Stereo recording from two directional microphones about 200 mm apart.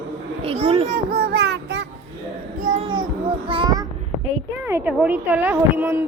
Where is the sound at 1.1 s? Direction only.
55° right (ahead or behind).